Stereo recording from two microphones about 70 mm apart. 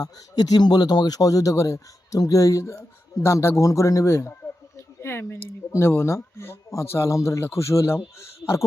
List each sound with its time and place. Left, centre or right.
0.0 s a man's voice: left